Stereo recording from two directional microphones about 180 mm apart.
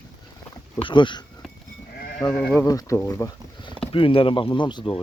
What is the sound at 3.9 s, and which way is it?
Speech, 30° left (ahead or behind).